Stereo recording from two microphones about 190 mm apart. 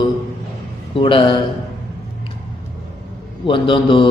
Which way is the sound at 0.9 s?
25° left (ahead or behind).